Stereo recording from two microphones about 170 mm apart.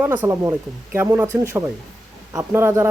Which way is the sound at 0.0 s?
10° right (ahead or behind).